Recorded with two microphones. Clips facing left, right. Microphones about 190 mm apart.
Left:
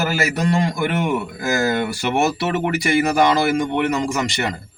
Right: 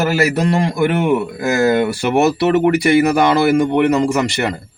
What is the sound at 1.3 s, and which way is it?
Speech, 60° right (ahead or behind).